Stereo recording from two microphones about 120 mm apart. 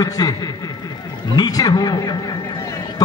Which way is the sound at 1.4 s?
30° left (ahead or behind).